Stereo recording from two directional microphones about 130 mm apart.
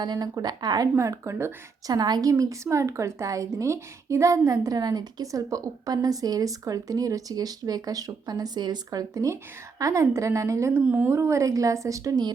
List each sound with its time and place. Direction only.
0.0 s speech: 30° right (ahead or behind)
0.9 s a woman's voice: 20° right (ahead or behind)
2.0 s a woman's voice: 30° right (ahead or behind)